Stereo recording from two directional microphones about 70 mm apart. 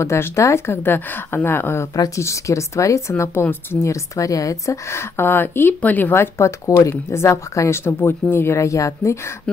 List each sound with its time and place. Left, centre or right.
0.0 s a woman's voice: left
2.1 s a woman's voice: left